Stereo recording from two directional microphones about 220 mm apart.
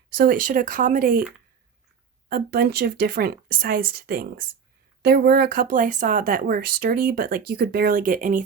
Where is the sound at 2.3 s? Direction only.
45° right (ahead or behind).